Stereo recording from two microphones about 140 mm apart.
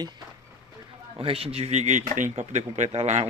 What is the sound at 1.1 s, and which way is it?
Speech, 45° right (ahead or behind).